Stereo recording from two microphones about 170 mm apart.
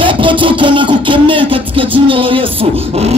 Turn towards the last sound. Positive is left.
turn(degrees=-35)  # may be behind; listen again after turning